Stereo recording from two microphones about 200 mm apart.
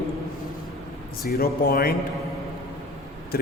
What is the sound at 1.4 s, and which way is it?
Speech, 50° left (ahead or behind).